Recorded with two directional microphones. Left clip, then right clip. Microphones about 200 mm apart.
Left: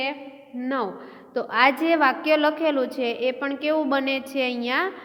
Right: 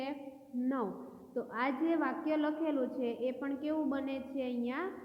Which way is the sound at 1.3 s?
20° left (ahead or behind).